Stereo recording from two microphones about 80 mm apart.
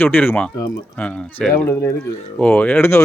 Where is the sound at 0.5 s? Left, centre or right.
Left.